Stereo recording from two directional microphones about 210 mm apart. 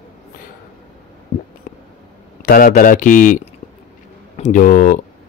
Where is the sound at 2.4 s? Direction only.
40° left (ahead or behind).